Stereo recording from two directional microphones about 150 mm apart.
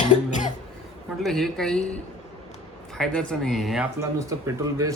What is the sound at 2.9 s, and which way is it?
Speech, 5° left (ahead or behind).